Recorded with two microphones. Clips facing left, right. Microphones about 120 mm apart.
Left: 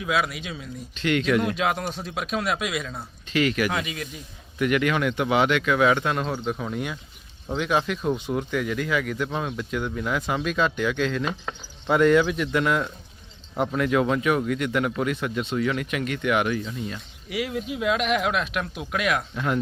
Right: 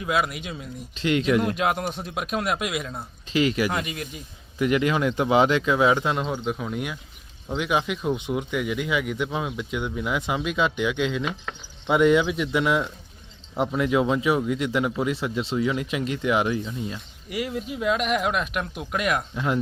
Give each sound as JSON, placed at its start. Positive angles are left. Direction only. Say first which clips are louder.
{"t": 0.0, "sound": "speech", "louder": "even", "side_deg": 0}
{"t": 1.0, "sound": "speech", "louder": "right 1 dB", "side_deg": -25}
{"t": 1.4, "sound": "speech", "louder": "right 1 dB", "side_deg": -10}
{"t": 2.9, "sound": "speech", "louder": "right 1 dB", "side_deg": -25}
{"t": 3.7, "sound": "speech", "louder": "even", "side_deg": -5}
{"t": 4.6, "sound": "speech", "louder": "right 1 dB", "side_deg": -25}
{"t": 6.6, "sound": "speech", "louder": "even", "side_deg": -5}
{"t": 17.2, "sound": "speech", "louder": "left 1 dB", "side_deg": 0}